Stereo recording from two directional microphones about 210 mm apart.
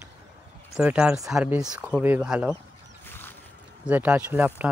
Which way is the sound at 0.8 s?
5° right (ahead or behind).